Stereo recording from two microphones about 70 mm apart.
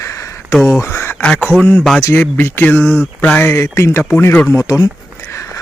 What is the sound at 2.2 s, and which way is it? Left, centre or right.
Speech, left.